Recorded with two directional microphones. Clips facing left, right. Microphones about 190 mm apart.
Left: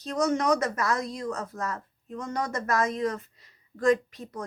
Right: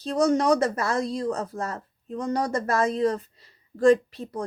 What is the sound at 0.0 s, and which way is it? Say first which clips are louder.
Speech: right 4 dB; 30° right (ahead or behind).